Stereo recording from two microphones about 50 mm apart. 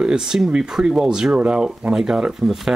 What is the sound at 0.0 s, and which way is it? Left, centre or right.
Speech, centre.